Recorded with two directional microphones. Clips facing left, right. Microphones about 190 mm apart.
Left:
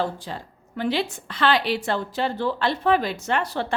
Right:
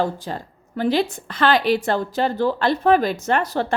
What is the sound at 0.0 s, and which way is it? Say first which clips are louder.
A woman's voice: right 4 dB; 45° right (ahead or behind).